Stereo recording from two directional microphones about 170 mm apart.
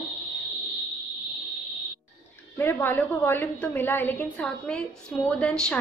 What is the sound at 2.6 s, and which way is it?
A woman's voice, 10° left (ahead or behind).